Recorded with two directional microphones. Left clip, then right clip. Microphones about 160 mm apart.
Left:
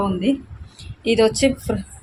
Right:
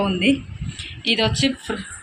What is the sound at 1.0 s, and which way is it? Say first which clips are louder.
Speech: left 3 dB; 50° left (ahead or behind).